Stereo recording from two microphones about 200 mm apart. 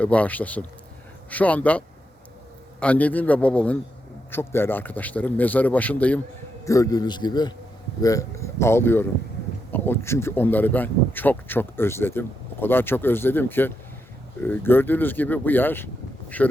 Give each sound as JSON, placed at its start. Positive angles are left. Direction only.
{"t": 0.0, "sound": "speech", "side_deg": 5}
{"t": 2.8, "sound": "a man's voice", "side_deg": 5}